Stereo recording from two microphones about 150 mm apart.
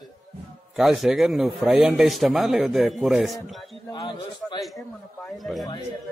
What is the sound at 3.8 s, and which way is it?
Speech, 25° left (ahead or behind).